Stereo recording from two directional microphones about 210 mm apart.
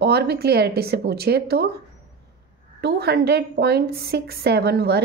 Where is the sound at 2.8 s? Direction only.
50° right (ahead or behind).